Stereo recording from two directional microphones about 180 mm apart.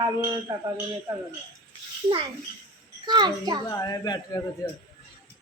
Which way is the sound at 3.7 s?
20° left (ahead or behind).